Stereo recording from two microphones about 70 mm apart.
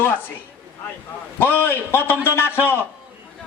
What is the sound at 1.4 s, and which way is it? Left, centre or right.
A man's voice, left.